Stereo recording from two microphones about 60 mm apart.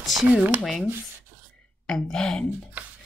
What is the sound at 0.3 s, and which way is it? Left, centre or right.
Speech, right.